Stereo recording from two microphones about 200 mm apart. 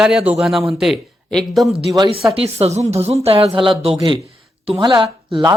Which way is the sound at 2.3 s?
30° right (ahead or behind).